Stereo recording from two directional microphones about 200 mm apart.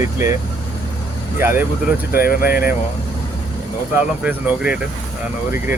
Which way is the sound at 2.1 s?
50° left (ahead or behind).